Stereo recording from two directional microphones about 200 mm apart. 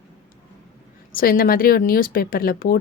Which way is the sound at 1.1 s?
45° left (ahead or behind).